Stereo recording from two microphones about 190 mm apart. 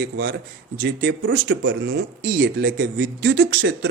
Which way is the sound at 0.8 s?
75° right (ahead or behind).